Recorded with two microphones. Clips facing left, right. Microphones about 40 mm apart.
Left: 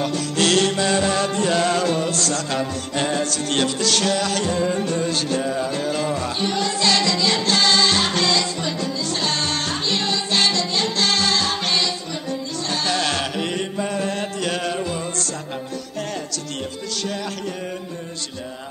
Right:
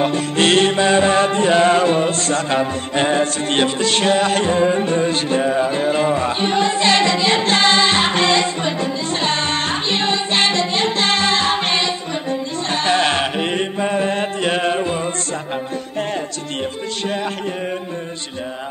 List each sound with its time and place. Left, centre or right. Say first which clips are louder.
0.0 s music: right 4 dB; right